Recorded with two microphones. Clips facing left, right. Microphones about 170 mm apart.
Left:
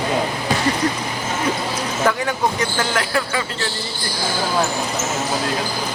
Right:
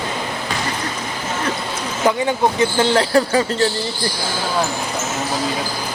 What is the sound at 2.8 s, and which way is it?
Speech, 30° right (ahead or behind).